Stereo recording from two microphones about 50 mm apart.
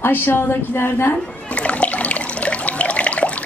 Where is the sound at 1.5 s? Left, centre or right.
Left.